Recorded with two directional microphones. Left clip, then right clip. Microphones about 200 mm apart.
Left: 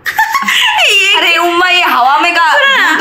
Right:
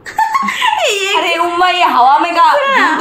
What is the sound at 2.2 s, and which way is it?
Speech, 5° left (ahead or behind).